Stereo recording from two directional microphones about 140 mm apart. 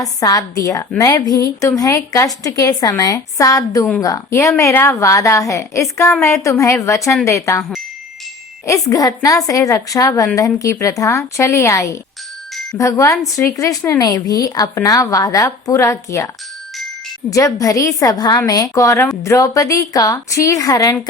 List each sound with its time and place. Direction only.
0.0 s a woman's voice: 25° left (ahead or behind)
8.6 s a woman's voice: 20° left (ahead or behind)
17.3 s a woman's voice: 25° left (ahead or behind)